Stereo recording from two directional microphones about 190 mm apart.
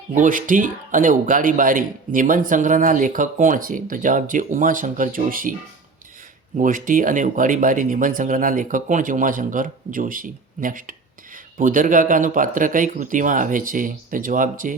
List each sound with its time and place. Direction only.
0.1 s speech: 45° right (ahead or behind)
6.6 s speech: 45° right (ahead or behind)